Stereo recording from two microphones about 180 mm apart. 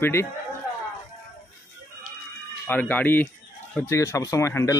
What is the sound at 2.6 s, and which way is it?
A man's voice, 10° left (ahead or behind).